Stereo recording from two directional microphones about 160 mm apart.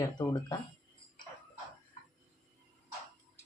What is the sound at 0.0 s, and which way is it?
Speech, 25° left (ahead or behind).